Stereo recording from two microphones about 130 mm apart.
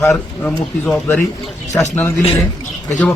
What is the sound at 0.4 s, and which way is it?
Speech, 10° left (ahead or behind).